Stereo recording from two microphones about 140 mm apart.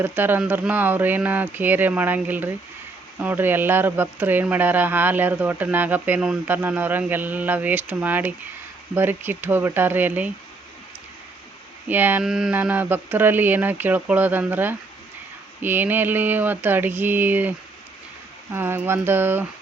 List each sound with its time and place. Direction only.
0.0 s speech: 15° right (ahead or behind)
11.9 s speech: 15° right (ahead or behind)
18.5 s speech: 15° right (ahead or behind)